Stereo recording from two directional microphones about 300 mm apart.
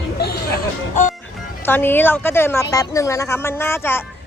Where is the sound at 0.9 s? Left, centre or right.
Left.